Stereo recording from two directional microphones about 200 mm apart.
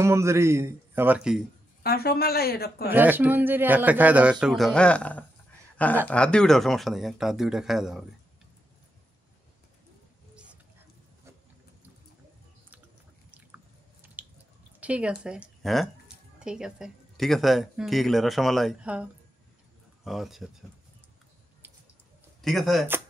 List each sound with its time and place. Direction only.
0.0 s speech: 15° right (ahead or behind)
1.8 s speech: 50° left (ahead or behind)
2.9 s speech: 10° right (ahead or behind)
10.3 s oink: 5° right (ahead or behind)
14.2 s drip: 10° right (ahead or behind)
14.8 s speech: 5° right (ahead or behind)
20.1 s speech: centre (ahead or behind)
21.6 s a sound: 10° right (ahead or behind)
22.4 s speech: centre (ahead or behind)